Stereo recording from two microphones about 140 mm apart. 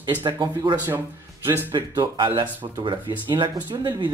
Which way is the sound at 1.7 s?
35° right (ahead or behind).